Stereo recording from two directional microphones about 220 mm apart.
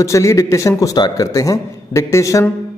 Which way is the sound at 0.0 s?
15° left (ahead or behind).